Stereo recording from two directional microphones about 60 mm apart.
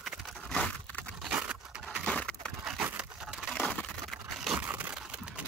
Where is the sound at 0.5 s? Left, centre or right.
Centre.